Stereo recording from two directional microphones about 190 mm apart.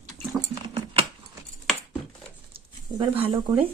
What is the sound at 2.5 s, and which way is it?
Speech, 30° right (ahead or behind).